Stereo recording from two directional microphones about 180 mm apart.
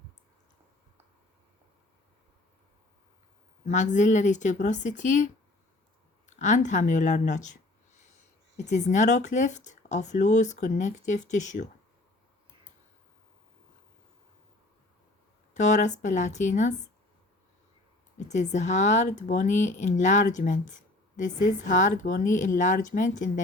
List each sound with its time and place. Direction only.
3.7 s speech: 45° left (ahead or behind)
8.7 s speech: 40° left (ahead or behind)
15.5 s speech: 40° left (ahead or behind)
18.2 s speech: 40° left (ahead or behind)